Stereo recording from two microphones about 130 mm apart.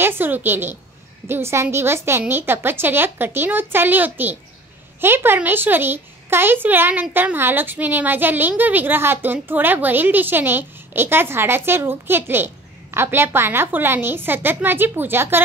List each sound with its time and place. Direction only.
0.0 s speech: 15° right (ahead or behind)